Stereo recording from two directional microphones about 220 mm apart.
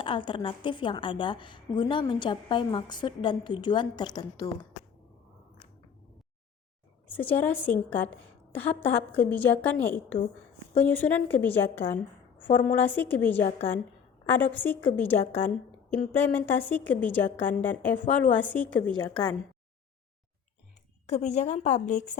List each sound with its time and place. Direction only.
0.0 s a woman's voice: 20° left (ahead or behind)
7.1 s a woman's voice: 10° left (ahead or behind)
21.1 s a woman's voice: 30° left (ahead or behind)